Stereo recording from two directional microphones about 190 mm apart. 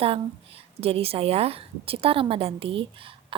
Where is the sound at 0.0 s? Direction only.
30° right (ahead or behind).